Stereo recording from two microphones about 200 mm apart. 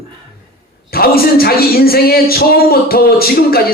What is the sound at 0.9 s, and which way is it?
Speech, 50° left (ahead or behind).